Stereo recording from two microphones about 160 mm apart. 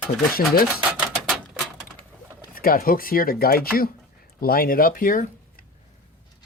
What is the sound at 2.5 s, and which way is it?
Speech, 65° left (ahead or behind).